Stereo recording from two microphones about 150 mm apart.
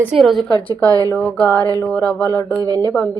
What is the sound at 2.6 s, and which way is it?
Speech, 25° right (ahead or behind).